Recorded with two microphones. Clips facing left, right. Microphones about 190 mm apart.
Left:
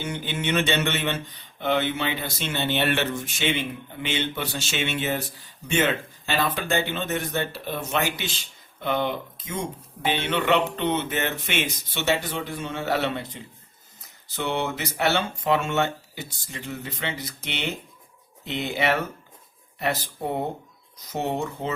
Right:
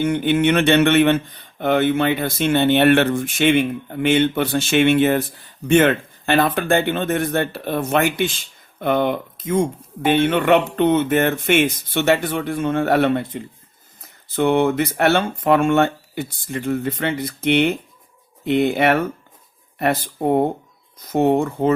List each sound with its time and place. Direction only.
0.0 s speech: 55° right (ahead or behind)